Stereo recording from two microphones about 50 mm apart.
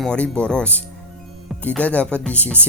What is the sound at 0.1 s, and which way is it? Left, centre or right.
Speech, left.